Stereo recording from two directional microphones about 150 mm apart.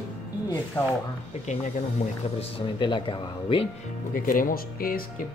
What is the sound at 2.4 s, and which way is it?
Speech, 35° left (ahead or behind).